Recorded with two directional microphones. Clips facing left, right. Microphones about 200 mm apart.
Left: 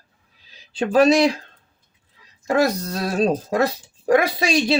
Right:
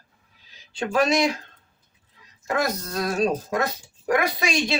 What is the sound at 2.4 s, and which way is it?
Speech, 30° left (ahead or behind).